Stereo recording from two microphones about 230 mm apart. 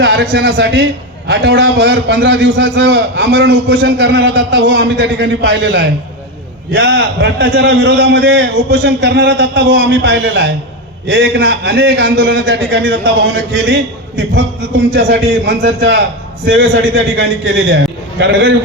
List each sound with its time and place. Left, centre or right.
0.0 s a man's voice: right
14.9 s a man's voice: right